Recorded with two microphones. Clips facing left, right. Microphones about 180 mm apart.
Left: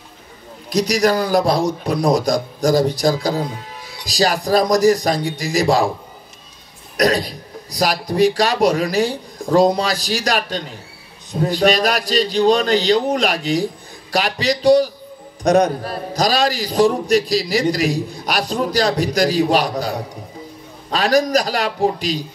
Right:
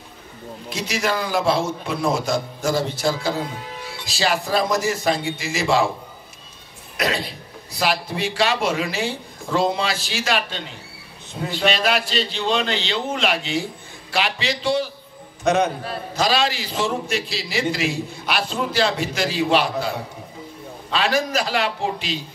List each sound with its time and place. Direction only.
0.7 s a man's voice: 40° left (ahead or behind)
7.0 s a man's voice: 40° left (ahead or behind)